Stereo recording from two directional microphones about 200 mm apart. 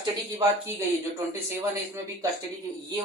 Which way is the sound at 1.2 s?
15° right (ahead or behind).